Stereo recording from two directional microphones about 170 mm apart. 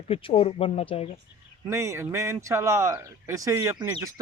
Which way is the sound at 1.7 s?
15° right (ahead or behind).